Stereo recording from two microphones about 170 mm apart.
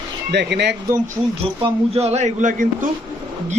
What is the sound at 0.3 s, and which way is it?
Speech, 80° right.